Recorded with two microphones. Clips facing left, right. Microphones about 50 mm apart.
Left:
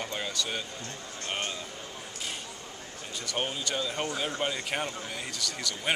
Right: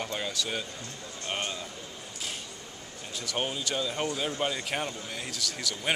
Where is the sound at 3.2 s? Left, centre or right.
Centre.